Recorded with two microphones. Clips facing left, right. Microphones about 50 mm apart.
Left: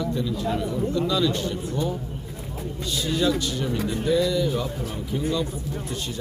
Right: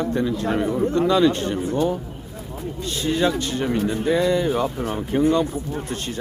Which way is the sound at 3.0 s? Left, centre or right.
Right.